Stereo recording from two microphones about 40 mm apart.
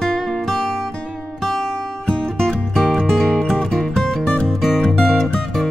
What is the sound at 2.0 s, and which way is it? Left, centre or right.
Music, centre.